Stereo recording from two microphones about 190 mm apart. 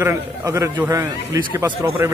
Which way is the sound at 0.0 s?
15° right (ahead or behind).